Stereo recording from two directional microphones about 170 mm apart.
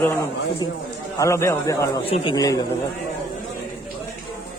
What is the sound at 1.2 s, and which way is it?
Speech, 15° left (ahead or behind).